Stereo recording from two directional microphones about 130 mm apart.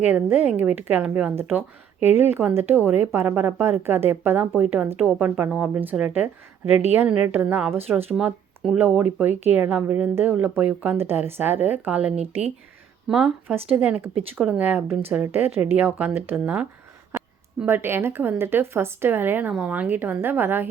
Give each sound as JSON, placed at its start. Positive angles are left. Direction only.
{"t": 0.0, "sound": "speech", "side_deg": -15}
{"t": 12.1, "sound": "speech", "side_deg": -50}
{"t": 13.1, "sound": "speech", "side_deg": -5}
{"t": 17.2, "sound": "a sound", "side_deg": -5}
{"t": 17.7, "sound": "speech", "side_deg": -20}